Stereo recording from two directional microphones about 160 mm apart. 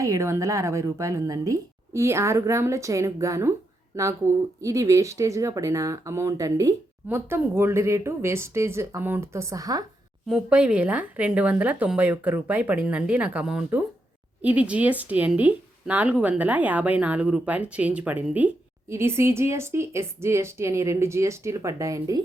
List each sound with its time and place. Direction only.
0.0 s a woman's voice: 20° right (ahead or behind)
10.2 s a woman's voice: 5° right (ahead or behind); by 22.2 s 20° right (ahead or behind)